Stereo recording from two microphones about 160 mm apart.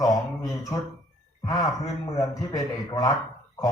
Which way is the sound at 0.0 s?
20° left (ahead or behind).